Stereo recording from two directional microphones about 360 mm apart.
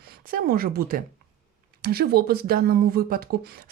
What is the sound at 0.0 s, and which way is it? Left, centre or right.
Speech, right.